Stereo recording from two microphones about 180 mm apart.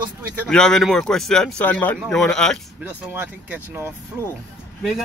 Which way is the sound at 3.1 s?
10° right (ahead or behind).